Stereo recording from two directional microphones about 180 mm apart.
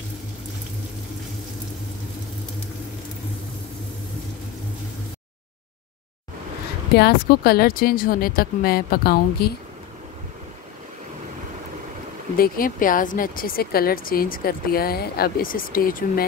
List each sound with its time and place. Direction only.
7.0 s speech: 60° left (ahead or behind)
12.4 s speech: 50° left (ahead or behind)